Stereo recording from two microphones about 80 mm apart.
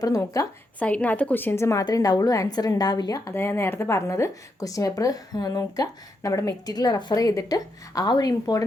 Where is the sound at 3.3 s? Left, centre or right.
Left.